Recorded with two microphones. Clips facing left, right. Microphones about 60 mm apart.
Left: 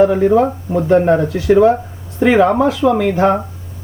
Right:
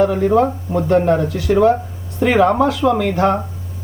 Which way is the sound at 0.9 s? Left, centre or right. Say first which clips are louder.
Left 3 dB; left.